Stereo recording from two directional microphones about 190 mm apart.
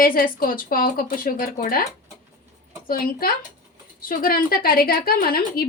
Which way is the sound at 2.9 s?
50° left (ahead or behind).